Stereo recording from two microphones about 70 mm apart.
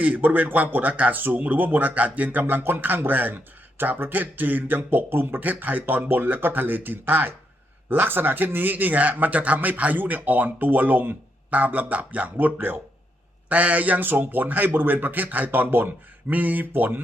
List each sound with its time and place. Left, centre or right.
0.0 s speech: right